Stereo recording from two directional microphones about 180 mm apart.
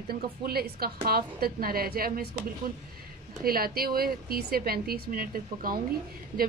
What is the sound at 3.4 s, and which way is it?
A woman's voice, 55° right (ahead or behind).